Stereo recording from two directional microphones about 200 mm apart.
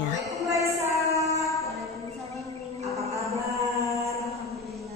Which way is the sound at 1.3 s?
15° left (ahead or behind).